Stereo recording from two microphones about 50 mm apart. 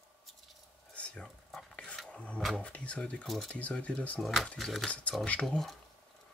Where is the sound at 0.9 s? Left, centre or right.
Left.